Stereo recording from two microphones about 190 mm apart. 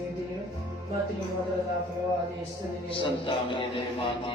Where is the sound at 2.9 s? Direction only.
25° left (ahead or behind).